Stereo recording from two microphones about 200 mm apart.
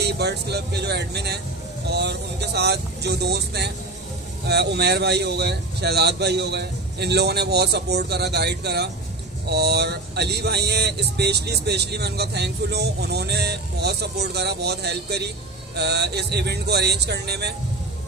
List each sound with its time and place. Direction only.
0.0 s speech: 55° right (ahead or behind)